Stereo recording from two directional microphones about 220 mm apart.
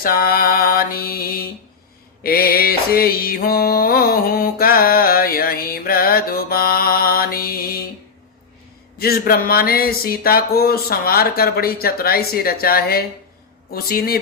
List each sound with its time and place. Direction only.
0.0 s speech: 40° left (ahead or behind)
2.2 s music: 40° left (ahead or behind)
9.0 s speech: 45° left (ahead or behind)